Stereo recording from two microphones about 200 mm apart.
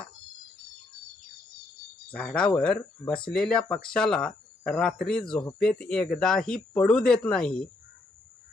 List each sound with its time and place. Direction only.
2.1 s speech: 5° left (ahead or behind)
3.1 s speech: 25° left (ahead or behind)
3.3 s speech: 5° left (ahead or behind)